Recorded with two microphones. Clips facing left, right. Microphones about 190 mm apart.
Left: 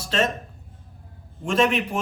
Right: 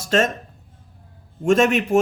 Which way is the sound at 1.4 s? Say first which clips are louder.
Right 5 dB; 45° right (ahead or behind).